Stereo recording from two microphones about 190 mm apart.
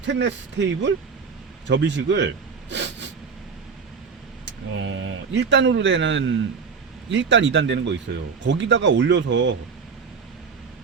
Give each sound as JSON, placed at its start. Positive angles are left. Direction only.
{"t": 0.0, "sound": "speech", "side_deg": -65}
{"t": 1.6, "sound": "a sound", "side_deg": -70}
{"t": 4.7, "sound": "a man's voice", "side_deg": -90}